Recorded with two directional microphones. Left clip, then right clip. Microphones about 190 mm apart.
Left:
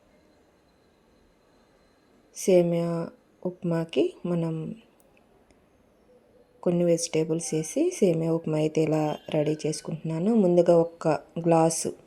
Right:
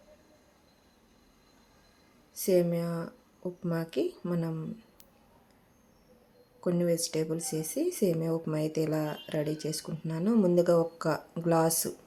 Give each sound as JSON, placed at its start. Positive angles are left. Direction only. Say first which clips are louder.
{"t": 2.3, "sound": "speech", "louder": "left 6 dB", "side_deg": 20}
{"t": 6.7, "sound": "speech", "louder": "left 5 dB", "side_deg": 15}